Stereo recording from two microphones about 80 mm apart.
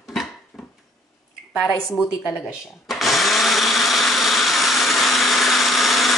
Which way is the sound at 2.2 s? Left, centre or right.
Centre.